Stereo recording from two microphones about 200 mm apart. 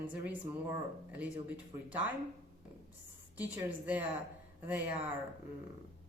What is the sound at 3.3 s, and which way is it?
Speech, 10° right (ahead or behind).